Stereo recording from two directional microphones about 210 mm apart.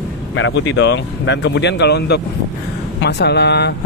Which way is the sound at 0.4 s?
60° left (ahead or behind).